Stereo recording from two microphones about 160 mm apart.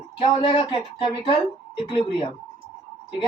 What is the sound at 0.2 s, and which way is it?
A man's voice, 35° left (ahead or behind).